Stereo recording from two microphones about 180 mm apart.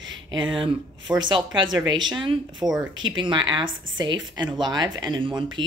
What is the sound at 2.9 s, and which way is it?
Speech, 90° right.